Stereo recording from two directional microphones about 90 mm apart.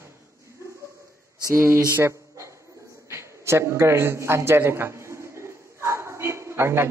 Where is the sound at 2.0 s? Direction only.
35° right (ahead or behind).